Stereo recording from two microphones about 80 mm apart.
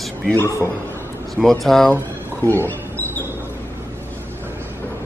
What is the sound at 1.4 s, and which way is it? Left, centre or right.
Speech, centre.